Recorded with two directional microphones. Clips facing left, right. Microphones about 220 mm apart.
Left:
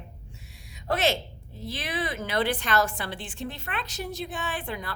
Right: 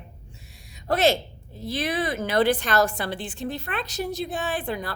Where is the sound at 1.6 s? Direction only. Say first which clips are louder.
Right 5 dB; 40° right (ahead or behind).